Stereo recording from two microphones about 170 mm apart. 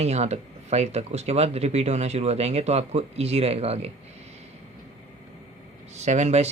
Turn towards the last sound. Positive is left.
turn(degrees=-40)  # may be behind; listen again after turning